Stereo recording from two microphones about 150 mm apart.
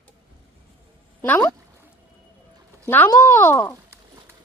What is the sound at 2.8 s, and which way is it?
Speech, 10° left (ahead or behind).